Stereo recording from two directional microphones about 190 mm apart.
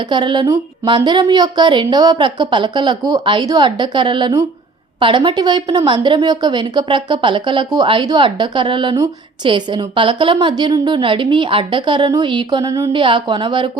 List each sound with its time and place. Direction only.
0.1 s a woman's voice: 25° right (ahead or behind)